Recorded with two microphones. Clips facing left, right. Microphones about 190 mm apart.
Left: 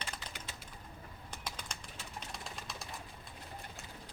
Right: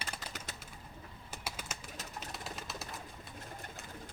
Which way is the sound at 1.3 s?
5° right (ahead or behind).